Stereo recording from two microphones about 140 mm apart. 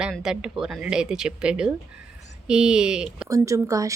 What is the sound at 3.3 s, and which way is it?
Speech, 25° right (ahead or behind).